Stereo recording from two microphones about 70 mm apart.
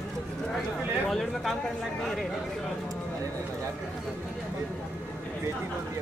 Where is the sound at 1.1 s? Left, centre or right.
Centre.